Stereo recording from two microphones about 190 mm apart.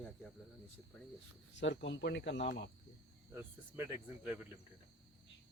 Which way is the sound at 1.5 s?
70° left (ahead or behind).